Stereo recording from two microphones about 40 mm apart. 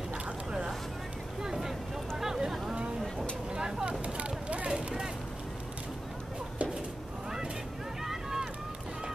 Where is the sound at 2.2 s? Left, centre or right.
Centre.